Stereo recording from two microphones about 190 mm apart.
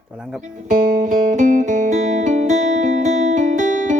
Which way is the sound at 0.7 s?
40° right (ahead or behind).